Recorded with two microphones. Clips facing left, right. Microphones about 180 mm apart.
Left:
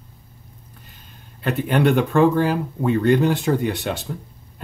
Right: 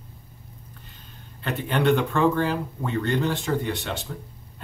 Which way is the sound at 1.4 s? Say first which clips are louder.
Left 5 dB; 10° left (ahead or behind).